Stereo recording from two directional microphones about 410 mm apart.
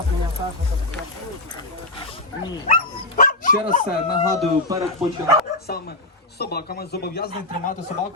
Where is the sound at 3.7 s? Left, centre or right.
Centre.